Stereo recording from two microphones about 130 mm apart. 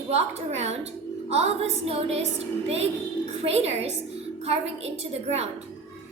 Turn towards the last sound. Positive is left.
turn(degrees=-55)  # may be behind; listen again after turning